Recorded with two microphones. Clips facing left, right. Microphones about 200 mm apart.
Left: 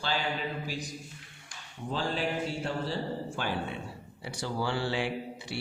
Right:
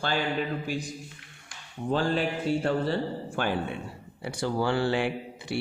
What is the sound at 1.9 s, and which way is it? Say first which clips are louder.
Music: right 7 dB; 55° right (ahead or behind).